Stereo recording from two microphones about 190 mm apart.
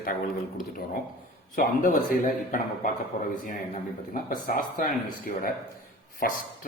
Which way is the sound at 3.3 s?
40° left (ahead or behind).